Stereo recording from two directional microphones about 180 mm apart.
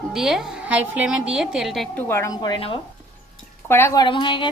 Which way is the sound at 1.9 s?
15° left (ahead or behind).